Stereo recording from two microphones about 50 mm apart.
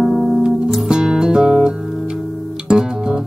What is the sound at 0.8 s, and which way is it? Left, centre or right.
Music, centre.